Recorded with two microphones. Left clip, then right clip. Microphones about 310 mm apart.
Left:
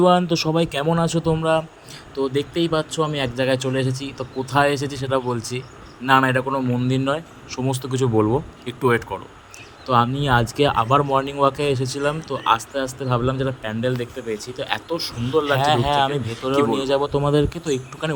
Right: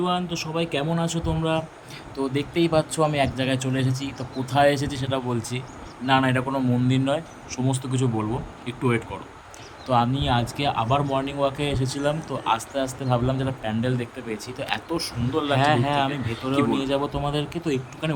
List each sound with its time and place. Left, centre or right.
0.0 s speech: centre
15.5 s speech: left